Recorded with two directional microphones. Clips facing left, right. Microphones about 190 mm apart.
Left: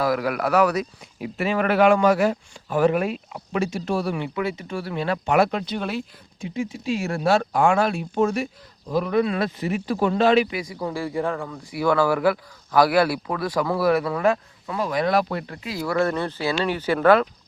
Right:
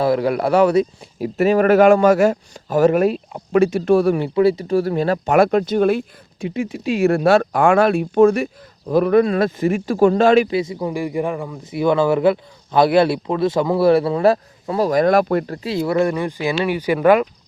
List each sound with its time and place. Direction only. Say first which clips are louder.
0.0 s speech: right 5 dB; 30° right (ahead or behind)
1.4 s speech: right 7 dB; 45° right (ahead or behind)
6.4 s speech: right 5 dB; 65° right (ahead or behind); by 10.5 s 45° right (ahead or behind)
10.5 s speech: right 7 dB; 25° right (ahead or behind); by 15.5 s 50° right (ahead or behind)
15.6 s speech: right 2 dB; 25° right (ahead or behind)